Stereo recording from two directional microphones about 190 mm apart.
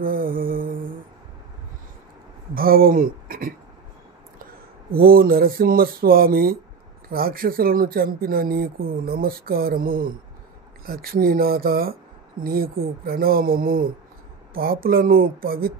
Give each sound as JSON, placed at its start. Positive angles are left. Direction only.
{"t": 0.0, "sound": "mantra", "side_deg": -50}
{"t": 2.5, "sound": "speech", "side_deg": -50}
{"t": 4.9, "sound": "speech", "side_deg": -50}